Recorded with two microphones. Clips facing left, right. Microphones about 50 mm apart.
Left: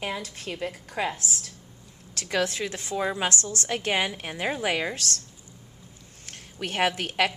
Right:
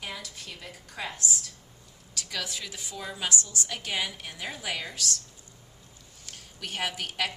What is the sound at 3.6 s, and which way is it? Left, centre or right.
A woman's voice, left.